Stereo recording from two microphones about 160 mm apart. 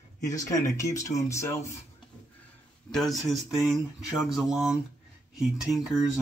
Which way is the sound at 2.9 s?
Centre (ahead or behind).